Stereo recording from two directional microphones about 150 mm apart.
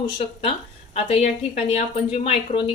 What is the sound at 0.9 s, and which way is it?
A woman's voice, 45° left (ahead or behind).